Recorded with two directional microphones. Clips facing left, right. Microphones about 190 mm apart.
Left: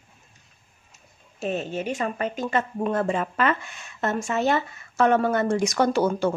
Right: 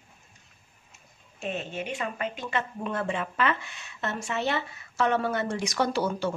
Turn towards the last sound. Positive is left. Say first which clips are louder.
# left 6 dB
turn(degrees=50)  # may be behind; listen again after turning